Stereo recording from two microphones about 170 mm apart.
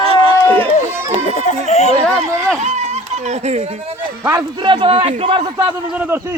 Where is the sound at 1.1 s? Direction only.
45° left (ahead or behind).